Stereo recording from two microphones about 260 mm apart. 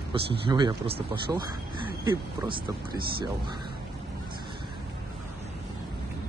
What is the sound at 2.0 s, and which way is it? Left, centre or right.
Speech, centre.